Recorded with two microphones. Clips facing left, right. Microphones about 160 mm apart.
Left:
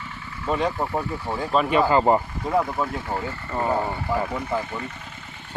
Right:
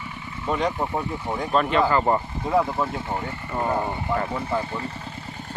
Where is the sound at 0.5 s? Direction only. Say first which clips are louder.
Left 1 dB; 5° left (ahead or behind).